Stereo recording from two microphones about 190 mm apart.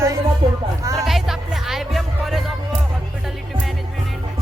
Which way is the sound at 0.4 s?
30° right (ahead or behind).